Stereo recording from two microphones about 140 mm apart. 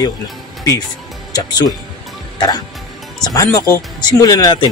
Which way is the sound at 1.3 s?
25° left (ahead or behind).